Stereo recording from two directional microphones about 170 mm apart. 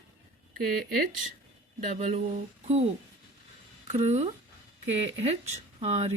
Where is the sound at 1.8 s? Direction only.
40° right (ahead or behind).